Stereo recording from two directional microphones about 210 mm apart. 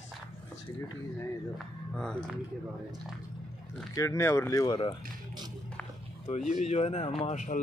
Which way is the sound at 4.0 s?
15° left (ahead or behind).